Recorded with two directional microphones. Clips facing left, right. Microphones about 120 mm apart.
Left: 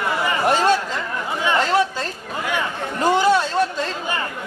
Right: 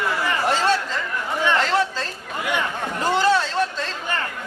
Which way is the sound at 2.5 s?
15° left (ahead or behind).